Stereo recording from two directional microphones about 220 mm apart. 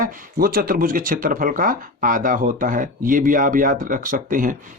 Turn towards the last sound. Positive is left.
turn(degrees=-35)  # may be behind; listen again after turning